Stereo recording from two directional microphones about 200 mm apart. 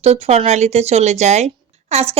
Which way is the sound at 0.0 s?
30° right (ahead or behind).